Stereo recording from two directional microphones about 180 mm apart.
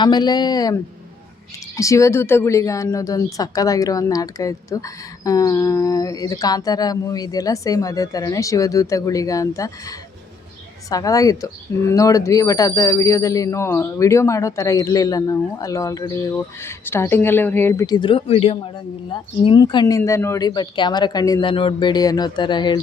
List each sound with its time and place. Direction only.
0.0 s speech: 25° left (ahead or behind)